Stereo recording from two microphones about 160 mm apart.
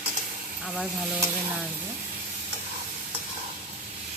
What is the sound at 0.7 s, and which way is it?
Stir, centre (ahead or behind).